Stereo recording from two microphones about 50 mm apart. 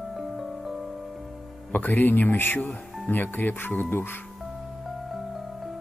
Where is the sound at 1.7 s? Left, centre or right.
Left.